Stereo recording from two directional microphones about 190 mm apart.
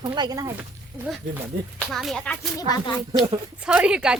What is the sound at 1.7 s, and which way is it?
Speech, centre (ahead or behind).